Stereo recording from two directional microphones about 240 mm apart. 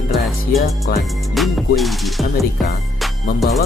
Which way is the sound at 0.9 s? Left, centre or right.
Left.